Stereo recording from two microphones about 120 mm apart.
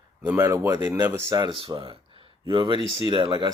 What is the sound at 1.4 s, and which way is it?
Speech, 45° right (ahead or behind).